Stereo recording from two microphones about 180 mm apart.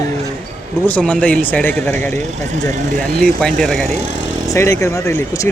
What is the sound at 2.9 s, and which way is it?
Speech, 60° right (ahead or behind).